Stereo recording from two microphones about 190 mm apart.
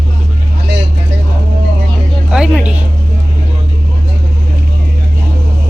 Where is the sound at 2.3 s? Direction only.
5° right (ahead or behind).